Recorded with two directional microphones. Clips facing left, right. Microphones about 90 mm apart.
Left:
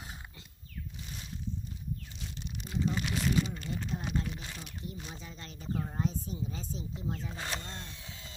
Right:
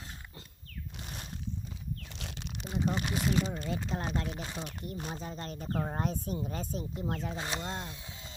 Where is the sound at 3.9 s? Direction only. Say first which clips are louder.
Right 3 dB; 90° right.